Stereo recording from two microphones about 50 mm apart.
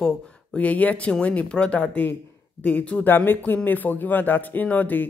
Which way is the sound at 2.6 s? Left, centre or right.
Left.